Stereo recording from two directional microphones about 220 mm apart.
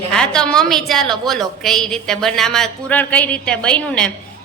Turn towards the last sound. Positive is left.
turn(degrees=5)  # may be behind; listen again after turning